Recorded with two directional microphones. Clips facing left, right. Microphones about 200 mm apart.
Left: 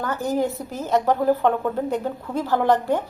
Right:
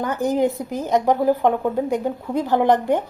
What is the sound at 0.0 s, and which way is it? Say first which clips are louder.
A woman's voice: right 3 dB; 15° right (ahead or behind).